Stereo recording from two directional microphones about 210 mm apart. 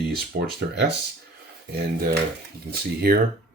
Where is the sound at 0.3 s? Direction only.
45° right (ahead or behind).